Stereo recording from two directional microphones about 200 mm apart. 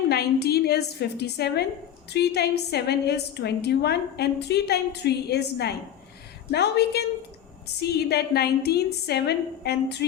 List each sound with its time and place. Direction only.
0.1 s a woman's voice: 55° left (ahead or behind)